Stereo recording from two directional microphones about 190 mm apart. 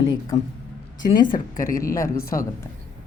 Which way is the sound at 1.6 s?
45° left (ahead or behind).